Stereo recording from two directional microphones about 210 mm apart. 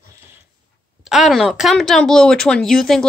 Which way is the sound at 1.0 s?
Centre (ahead or behind).